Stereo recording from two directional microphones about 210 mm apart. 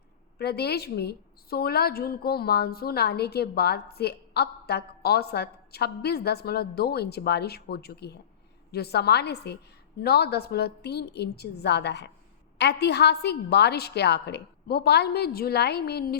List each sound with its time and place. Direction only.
0.3 s a woman's voice: 50° left (ahead or behind)